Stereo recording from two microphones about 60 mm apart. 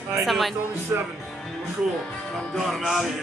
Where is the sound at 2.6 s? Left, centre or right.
Centre.